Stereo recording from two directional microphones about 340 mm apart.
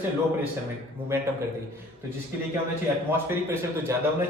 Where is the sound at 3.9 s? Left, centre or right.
Centre.